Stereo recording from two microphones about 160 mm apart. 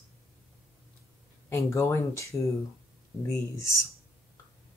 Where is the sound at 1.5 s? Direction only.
20° left (ahead or behind).